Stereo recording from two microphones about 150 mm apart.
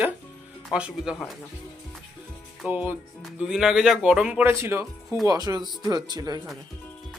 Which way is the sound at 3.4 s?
Centre (ahead or behind).